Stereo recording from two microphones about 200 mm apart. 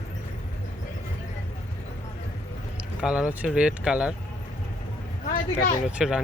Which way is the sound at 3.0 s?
5° right (ahead or behind).